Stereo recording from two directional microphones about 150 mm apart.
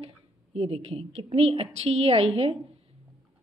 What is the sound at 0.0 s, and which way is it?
A woman's voice, 40° right (ahead or behind).